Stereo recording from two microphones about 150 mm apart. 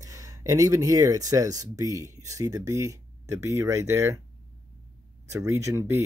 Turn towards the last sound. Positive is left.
turn(degrees=-20)  # may be behind; listen again after turning